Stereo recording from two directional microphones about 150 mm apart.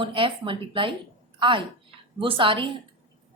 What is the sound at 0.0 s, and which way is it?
A woman's voice, 35° right (ahead or behind).